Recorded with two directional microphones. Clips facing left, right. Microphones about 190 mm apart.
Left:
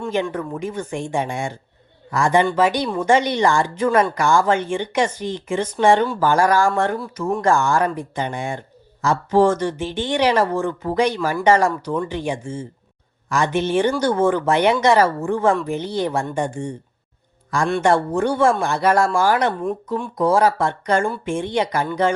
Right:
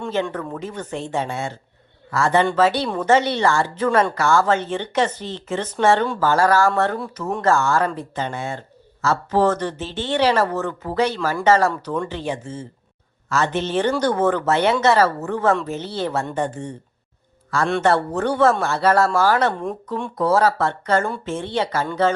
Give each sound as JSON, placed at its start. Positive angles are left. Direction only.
{"t": 0.1, "sound": "speech", "side_deg": 15}
{"t": 7.0, "sound": "speech", "side_deg": 0}
{"t": 7.4, "sound": "speech", "side_deg": 15}